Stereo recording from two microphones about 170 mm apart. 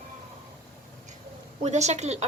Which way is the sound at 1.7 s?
40° right (ahead or behind).